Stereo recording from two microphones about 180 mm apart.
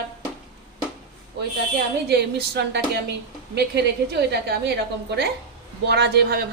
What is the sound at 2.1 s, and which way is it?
A woman's voice, 65° right (ahead or behind).